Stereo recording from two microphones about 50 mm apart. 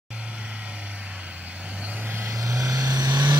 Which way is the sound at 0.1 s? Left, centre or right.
Right.